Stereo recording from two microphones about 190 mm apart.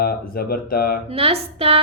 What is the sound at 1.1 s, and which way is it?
Female singing, 30° right (ahead or behind).